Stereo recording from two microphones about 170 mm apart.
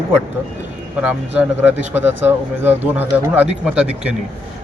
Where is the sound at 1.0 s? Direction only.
5° right (ahead or behind).